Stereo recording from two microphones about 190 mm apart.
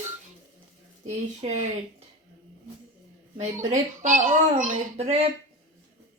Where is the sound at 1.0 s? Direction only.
40° right (ahead or behind).